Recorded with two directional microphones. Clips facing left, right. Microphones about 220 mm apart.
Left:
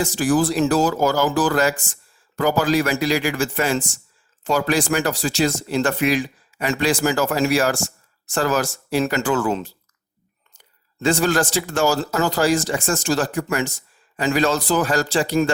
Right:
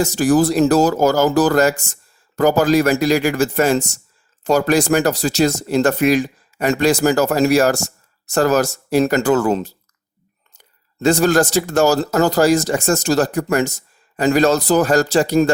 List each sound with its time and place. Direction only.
0.0 s speech: 40° right (ahead or behind)